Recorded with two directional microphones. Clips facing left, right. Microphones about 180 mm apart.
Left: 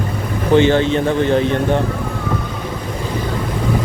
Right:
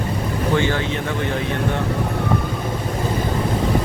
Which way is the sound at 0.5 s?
25° left (ahead or behind).